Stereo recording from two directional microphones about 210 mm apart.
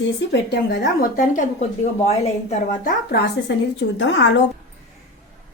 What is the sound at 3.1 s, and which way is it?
A woman's voice, 60° left (ahead or behind).